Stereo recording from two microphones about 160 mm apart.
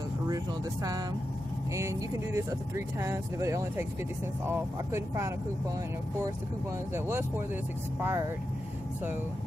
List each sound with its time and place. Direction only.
1.7 s speech: 20° right (ahead or behind)
6.9 s speech: 15° right (ahead or behind)